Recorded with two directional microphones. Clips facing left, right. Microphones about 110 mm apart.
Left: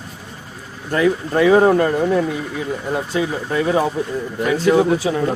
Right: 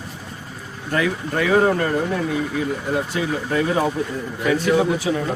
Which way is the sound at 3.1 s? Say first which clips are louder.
Left 2 dB; 25° left (ahead or behind).